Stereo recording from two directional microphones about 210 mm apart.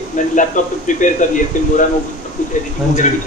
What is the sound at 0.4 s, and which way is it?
Speech, 35° left (ahead or behind).